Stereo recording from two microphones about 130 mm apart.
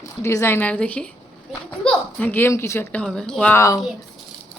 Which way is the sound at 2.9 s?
5° left (ahead or behind).